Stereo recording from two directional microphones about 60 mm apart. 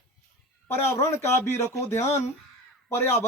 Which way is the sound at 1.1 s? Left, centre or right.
Left.